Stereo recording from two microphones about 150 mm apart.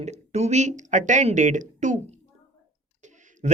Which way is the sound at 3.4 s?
50° right (ahead or behind).